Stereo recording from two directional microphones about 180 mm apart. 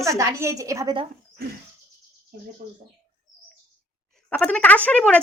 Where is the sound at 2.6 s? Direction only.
50° right (ahead or behind).